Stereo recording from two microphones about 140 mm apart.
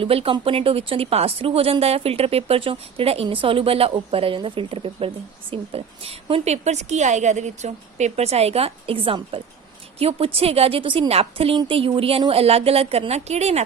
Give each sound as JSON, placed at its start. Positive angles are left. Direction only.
{"t": 0.0, "sound": "speech", "side_deg": -40}